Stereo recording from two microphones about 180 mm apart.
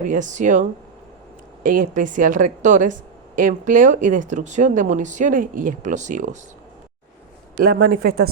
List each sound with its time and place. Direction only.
0.1 s speech: 45° right (ahead or behind)
7.6 s speech: 55° right (ahead or behind)